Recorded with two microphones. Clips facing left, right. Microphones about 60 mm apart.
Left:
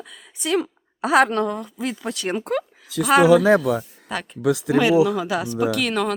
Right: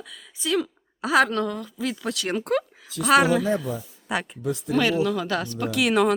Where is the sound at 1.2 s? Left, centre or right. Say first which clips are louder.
Left 3 dB; left.